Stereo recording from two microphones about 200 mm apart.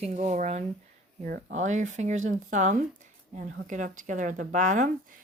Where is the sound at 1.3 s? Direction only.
50° right (ahead or behind).